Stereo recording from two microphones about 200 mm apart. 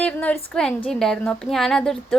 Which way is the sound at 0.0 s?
5° left (ahead or behind).